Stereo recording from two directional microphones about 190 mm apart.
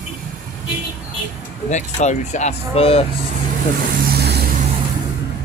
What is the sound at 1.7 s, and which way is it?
Speech, 40° left (ahead or behind).